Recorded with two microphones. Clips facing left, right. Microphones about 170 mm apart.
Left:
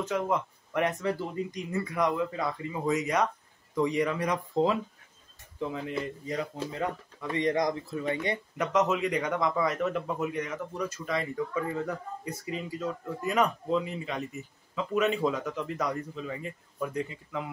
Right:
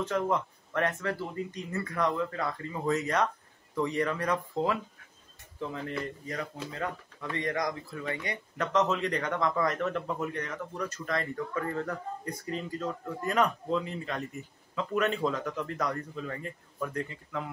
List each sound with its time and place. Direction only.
0.0 s speech: 5° left (ahead or behind); by 8.4 s 20° left (ahead or behind)
8.5 s speech: 10° left (ahead or behind)